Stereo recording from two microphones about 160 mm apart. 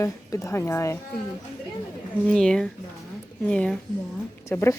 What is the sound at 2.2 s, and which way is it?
Speech, 5° left (ahead or behind).